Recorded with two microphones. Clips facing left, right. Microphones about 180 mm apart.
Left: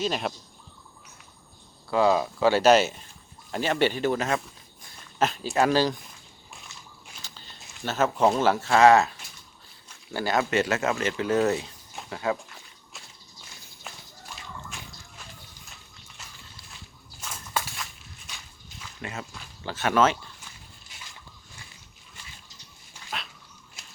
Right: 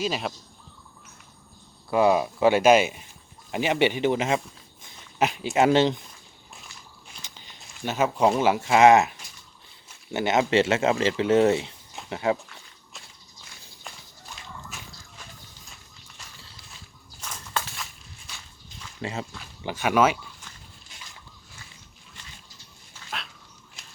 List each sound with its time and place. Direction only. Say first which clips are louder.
0.0 s speech: even; centre (ahead or behind)
1.9 s speech: right 2 dB; 15° right (ahead or behind)
7.2 s a sound: right 1 dB; 20° right (ahead or behind)
7.9 s speech: right 1 dB; 10° right (ahead or behind)
13.9 s a sound: even; 5° left (ahead or behind)
14.7 s walk: even; centre (ahead or behind)
17.2 s a sound: even; 10° left (ahead or behind)
19.0 s speech: right 5 dB; 30° right (ahead or behind)
19.6 s speech: right 1 dB; 10° right (ahead or behind)
23.0 s dog: even; centre (ahead or behind)